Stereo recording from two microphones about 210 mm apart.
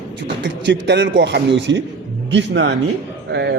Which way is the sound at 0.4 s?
55° right (ahead or behind).